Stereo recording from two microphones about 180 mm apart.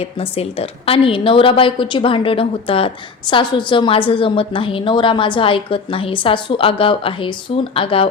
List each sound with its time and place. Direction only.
0.0 s a woman's voice: 30° left (ahead or behind)